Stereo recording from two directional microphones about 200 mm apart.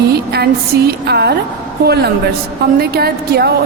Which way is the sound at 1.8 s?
55° right (ahead or behind).